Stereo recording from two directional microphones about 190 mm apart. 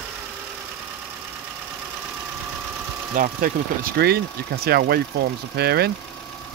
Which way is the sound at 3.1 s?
45° right (ahead or behind).